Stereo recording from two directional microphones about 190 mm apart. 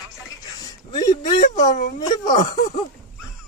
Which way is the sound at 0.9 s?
20° left (ahead or behind).